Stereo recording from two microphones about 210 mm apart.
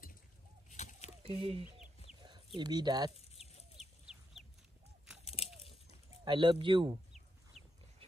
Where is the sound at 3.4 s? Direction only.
30° left (ahead or behind).